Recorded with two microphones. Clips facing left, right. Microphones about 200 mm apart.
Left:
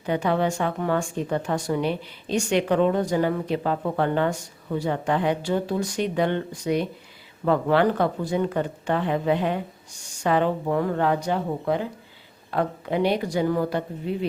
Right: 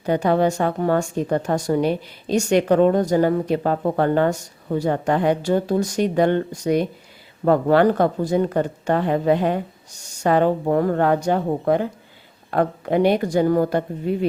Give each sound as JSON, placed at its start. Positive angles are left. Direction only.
{"t": 0.0, "sound": "speech", "side_deg": -40}